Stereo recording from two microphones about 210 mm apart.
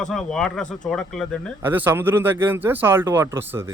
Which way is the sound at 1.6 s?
10° right (ahead or behind).